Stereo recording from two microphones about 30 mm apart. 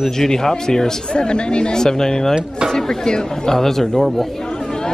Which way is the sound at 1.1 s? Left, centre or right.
Left.